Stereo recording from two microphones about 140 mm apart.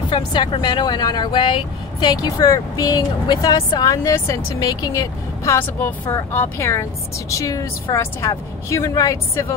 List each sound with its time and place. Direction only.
0.1 s speech: 35° left (ahead or behind)
2.4 s speech: 25° left (ahead or behind)